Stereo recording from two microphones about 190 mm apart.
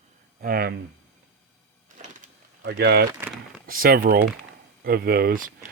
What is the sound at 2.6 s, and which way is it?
Speech, 60° right (ahead or behind).